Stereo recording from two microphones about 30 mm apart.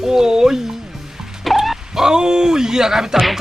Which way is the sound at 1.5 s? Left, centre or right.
Centre.